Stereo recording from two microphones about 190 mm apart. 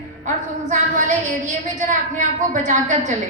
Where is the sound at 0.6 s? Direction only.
40° right (ahead or behind).